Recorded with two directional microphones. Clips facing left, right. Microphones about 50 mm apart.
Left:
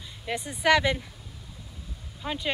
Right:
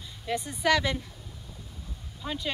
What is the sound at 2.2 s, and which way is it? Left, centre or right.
Speech, left.